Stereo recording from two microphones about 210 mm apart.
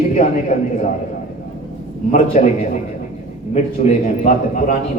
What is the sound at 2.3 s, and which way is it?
Speech, 35° left (ahead or behind).